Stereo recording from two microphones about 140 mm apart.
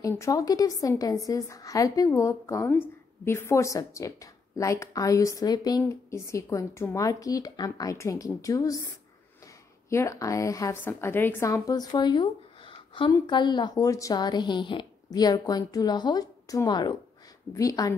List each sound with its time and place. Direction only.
0.1 s a woman's voice: 20° left (ahead or behind)